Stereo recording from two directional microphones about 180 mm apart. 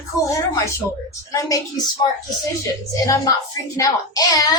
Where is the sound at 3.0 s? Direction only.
20° left (ahead or behind).